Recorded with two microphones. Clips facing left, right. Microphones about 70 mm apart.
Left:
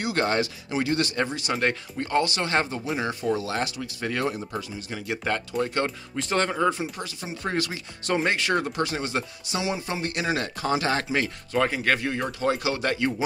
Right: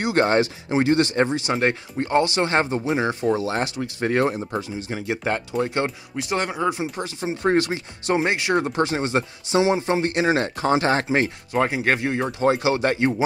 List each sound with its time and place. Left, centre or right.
0.0 s speech: right